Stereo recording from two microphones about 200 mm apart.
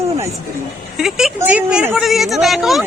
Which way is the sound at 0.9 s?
Centre (ahead or behind).